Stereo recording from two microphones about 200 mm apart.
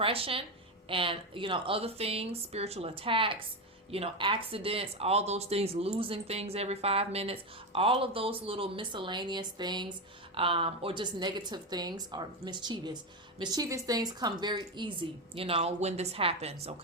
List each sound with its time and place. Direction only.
0.0 s speech: 30° right (ahead or behind)